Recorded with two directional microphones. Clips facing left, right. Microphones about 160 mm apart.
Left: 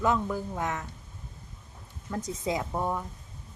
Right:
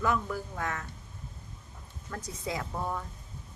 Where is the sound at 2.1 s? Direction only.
20° left (ahead or behind).